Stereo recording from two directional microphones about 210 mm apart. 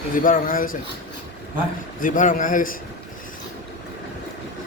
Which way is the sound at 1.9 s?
40° left (ahead or behind).